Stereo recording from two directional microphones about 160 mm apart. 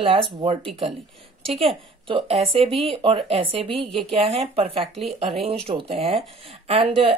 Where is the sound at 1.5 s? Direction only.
35° right (ahead or behind).